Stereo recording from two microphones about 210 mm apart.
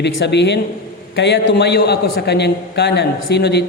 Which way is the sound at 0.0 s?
55° left (ahead or behind).